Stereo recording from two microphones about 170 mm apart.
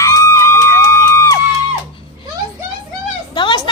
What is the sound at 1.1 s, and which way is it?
Music, 20° left (ahead or behind).